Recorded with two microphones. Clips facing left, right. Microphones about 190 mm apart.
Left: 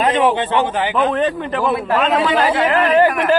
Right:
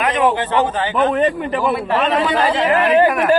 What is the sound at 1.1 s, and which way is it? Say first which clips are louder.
Speech: right 1 dB; 5° right (ahead or behind).